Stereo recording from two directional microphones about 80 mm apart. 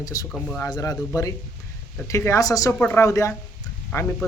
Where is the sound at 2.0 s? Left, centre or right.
Left.